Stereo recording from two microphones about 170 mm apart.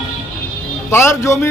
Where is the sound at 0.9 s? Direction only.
15° left (ahead or behind).